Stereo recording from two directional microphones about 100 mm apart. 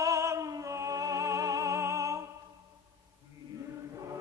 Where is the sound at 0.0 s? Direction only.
30° right (ahead or behind).